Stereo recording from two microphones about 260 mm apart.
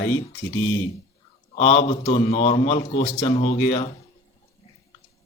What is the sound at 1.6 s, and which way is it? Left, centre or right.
A man's voice, left.